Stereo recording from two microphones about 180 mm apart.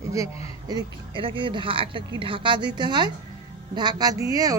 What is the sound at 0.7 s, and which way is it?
Speech, 25° right (ahead or behind).